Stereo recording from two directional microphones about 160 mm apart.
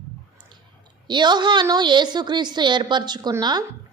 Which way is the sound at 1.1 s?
30° right (ahead or behind).